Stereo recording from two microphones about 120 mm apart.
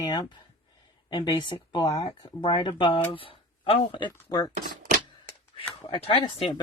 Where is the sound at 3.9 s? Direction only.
40° left (ahead or behind).